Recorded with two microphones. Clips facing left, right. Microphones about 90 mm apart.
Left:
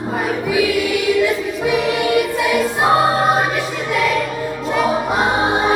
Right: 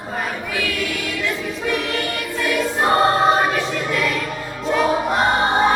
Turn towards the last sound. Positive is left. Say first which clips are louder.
# even
turn(degrees=5)  # may be behind; listen again after turning